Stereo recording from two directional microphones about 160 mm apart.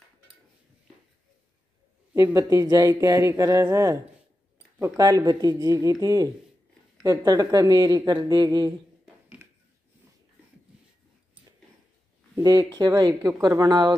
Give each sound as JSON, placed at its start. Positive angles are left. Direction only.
{"t": 2.1, "sound": "a woman's voice", "side_deg": -15}
{"t": 9.0, "sound": "a sound", "side_deg": -10}
{"t": 12.4, "sound": "a woman's voice", "side_deg": -25}